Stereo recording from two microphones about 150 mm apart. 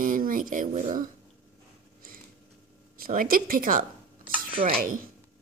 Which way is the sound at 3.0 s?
70° right (ahead or behind).